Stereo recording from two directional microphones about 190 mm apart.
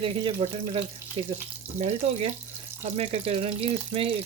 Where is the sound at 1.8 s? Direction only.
35° right (ahead or behind).